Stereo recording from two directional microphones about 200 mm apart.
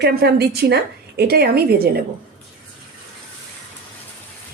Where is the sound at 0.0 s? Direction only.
55° right (ahead or behind).